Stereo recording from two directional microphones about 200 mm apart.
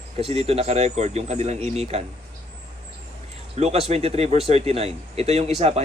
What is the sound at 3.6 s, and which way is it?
Speech, 30° right (ahead or behind).